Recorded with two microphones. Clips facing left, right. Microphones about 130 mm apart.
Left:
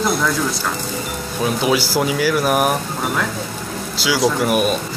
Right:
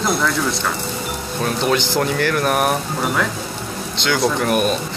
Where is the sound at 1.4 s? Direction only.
5° left (ahead or behind).